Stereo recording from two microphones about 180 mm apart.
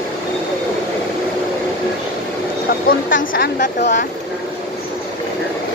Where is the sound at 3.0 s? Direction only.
90° left.